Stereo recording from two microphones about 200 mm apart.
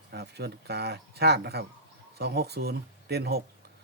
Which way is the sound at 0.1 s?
55° right (ahead or behind).